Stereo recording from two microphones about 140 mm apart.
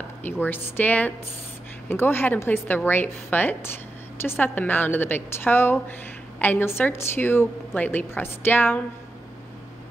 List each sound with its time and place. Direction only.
0.2 s a woman's voice: 15° left (ahead or behind)